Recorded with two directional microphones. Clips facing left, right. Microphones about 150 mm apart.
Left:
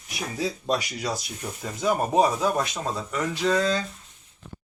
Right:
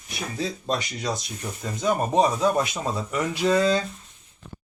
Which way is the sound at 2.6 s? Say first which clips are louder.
Right 2 dB; 5° right (ahead or behind).